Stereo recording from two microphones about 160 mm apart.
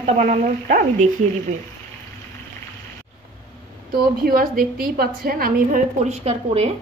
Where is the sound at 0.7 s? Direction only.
60° right (ahead or behind).